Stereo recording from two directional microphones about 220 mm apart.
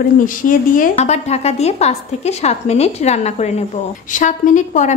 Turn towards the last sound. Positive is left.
turn(degrees=35)  # may be behind; listen again after turning